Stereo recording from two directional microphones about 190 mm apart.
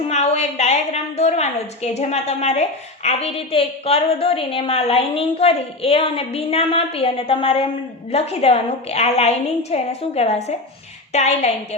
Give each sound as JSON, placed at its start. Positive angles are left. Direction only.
{"t": 0.1, "sound": "a woman's voice", "side_deg": 35}